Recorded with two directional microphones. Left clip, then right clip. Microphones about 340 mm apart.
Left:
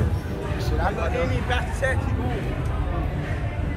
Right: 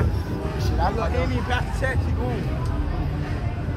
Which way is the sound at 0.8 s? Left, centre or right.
Right.